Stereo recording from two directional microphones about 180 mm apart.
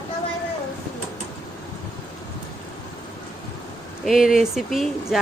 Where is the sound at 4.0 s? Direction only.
Centre (ahead or behind).